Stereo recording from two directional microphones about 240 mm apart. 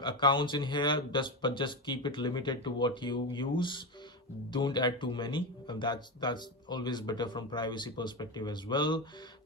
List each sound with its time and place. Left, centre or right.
0.0 s speech: centre